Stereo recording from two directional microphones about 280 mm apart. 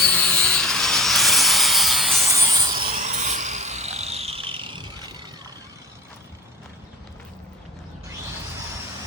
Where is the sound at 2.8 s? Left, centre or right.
Right.